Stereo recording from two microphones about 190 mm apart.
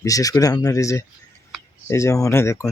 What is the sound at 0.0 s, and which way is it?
Speech, 20° left (ahead or behind).